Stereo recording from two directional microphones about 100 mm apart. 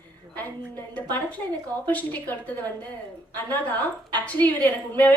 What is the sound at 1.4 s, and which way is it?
A woman's voice, 10° left (ahead or behind).